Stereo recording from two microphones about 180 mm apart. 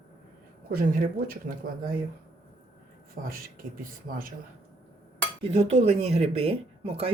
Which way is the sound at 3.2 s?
50° right (ahead or behind).